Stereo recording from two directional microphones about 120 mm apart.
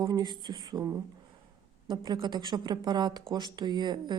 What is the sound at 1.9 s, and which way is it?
A woman's voice, 40° right (ahead or behind).